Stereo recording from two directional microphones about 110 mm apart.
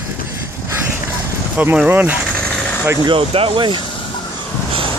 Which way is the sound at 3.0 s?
55° right (ahead or behind).